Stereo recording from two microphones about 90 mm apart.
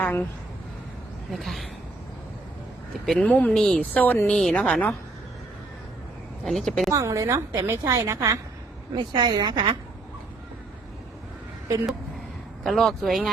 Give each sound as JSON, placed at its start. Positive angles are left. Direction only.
{"t": 0.0, "sound": "a sound", "side_deg": 20}
{"t": 1.3, "sound": "speech", "side_deg": 0}
{"t": 3.1, "sound": "a woman's voice", "side_deg": 5}
{"t": 6.4, "sound": "speech", "side_deg": 5}
{"t": 6.9, "sound": "a woman's voice", "side_deg": -40}
{"t": 9.0, "sound": "a woman's voice", "side_deg": -55}
{"t": 12.6, "sound": "speech", "side_deg": 0}